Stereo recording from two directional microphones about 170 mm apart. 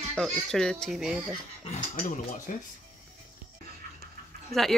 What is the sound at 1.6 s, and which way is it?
Speech, 40° left (ahead or behind).